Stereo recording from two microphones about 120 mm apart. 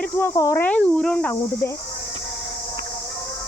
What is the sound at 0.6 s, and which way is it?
Speech, 10° left (ahead or behind).